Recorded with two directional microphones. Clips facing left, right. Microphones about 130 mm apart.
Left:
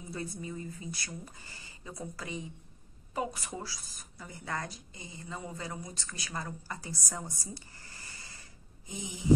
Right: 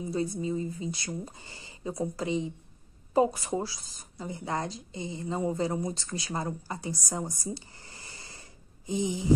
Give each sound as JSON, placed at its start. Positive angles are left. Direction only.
{"t": 0.1, "sound": "speech", "side_deg": -20}